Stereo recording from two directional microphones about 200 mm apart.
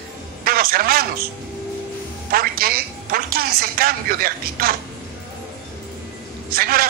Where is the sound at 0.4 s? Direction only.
50° right (ahead or behind).